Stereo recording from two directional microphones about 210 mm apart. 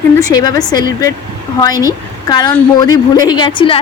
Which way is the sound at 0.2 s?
20° left (ahead or behind).